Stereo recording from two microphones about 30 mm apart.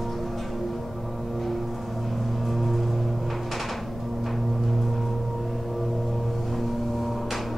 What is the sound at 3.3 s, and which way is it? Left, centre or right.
Music, centre.